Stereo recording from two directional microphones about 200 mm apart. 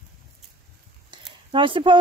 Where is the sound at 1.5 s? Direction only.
25° right (ahead or behind).